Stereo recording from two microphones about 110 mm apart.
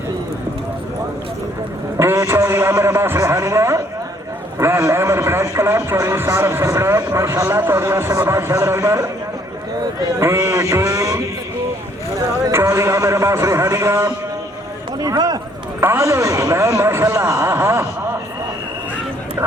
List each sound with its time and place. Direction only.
2.0 s vehicle: 25° right (ahead or behind)
4.5 s speech: 25° right (ahead or behind)
10.2 s mantra: 25° right (ahead or behind)
12.5 s speech: 25° right (ahead or behind)
14.9 s speech: 35° right (ahead or behind)
15.8 s speech: 25° right (ahead or behind)